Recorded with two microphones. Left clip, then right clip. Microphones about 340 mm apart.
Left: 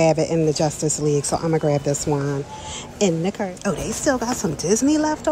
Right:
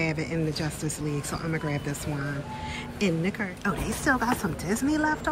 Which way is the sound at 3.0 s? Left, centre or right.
Centre.